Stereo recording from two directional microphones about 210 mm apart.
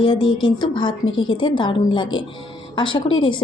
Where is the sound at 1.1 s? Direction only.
70° left (ahead or behind).